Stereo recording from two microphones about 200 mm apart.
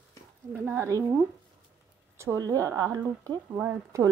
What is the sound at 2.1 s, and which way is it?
Speech, 15° right (ahead or behind).